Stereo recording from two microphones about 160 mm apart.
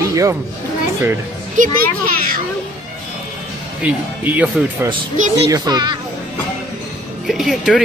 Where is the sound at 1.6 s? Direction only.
55° right (ahead or behind).